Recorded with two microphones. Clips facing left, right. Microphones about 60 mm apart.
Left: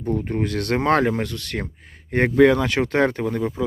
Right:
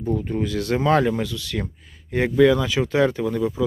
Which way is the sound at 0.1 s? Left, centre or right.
Left.